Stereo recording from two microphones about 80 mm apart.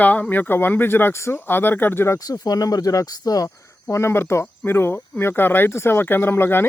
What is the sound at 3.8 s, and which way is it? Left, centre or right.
Speech, left.